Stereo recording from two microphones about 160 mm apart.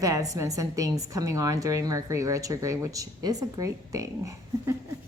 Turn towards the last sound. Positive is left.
turn(degrees=-20)  # may be behind; listen again after turning